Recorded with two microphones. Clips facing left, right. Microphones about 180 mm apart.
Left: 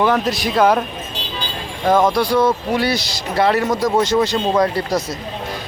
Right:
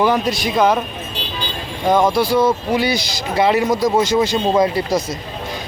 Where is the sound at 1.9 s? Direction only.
Centre (ahead or behind).